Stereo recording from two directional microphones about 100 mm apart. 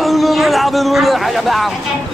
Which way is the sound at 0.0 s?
Centre (ahead or behind).